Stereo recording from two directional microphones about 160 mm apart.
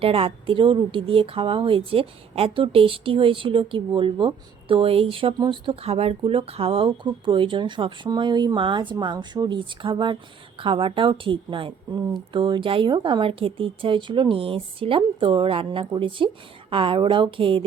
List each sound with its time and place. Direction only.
0.0 s speech: 35° right (ahead or behind)